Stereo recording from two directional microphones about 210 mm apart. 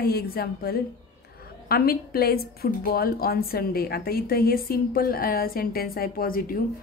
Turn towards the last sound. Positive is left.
turn(degrees=45)  # may be behind; listen again after turning